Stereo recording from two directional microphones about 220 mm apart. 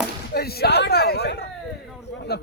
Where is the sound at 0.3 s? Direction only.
45° left (ahead or behind).